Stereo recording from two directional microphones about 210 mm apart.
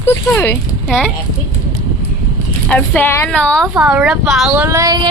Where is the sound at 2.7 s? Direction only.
5° left (ahead or behind).